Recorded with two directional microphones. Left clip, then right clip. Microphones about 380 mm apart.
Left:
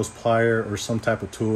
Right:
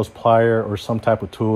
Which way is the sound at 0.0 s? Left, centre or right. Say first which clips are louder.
Right 5 dB; centre.